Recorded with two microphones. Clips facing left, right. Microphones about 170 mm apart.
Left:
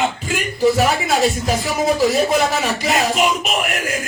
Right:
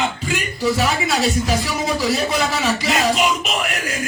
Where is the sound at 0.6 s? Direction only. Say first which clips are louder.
Left 4 dB; 50° left (ahead or behind).